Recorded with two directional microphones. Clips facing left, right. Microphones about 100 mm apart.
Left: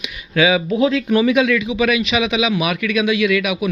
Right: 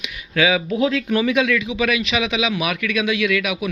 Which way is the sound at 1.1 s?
10° left (ahead or behind).